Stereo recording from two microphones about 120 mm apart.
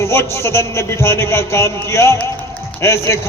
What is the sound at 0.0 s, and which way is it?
A man's voice, 20° left (ahead or behind).